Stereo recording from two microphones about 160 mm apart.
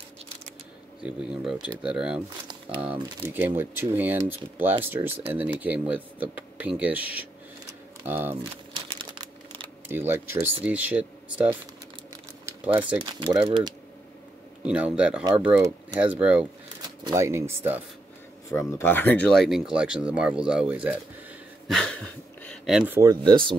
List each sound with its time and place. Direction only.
1.0 s speech: 5° right (ahead or behind)
8.1 s speech: 15° right (ahead or behind)
8.7 s crumpling: 30° right (ahead or behind)
9.8 s speech: 15° right (ahead or behind)
13.0 s speech: 30° right (ahead or behind)
14.6 s speech: 10° right (ahead or behind)
18.5 s speech: 15° left (ahead or behind); by 20.9 s 10° right (ahead or behind)
21.6 s speech: 5° left (ahead or behind)
22.9 s speech: 25° right (ahead or behind)